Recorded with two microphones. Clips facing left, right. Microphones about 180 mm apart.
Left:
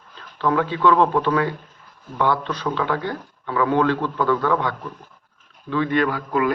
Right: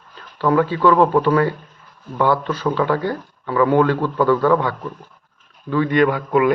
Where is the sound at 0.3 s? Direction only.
5° right (ahead or behind).